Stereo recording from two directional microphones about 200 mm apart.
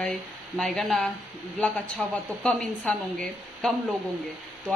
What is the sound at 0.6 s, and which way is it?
A woman's voice, centre (ahead or behind).